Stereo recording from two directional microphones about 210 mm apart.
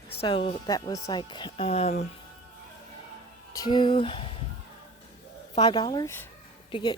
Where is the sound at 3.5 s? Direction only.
20° left (ahead or behind).